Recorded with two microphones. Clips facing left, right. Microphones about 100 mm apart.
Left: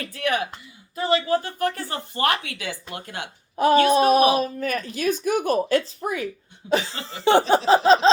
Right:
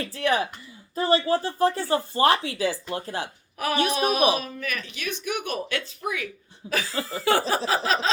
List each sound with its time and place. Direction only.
0.0 s speech: 30° right (ahead or behind)
3.6 s speech: 30° left (ahead or behind)
6.7 s a sound: 25° left (ahead or behind)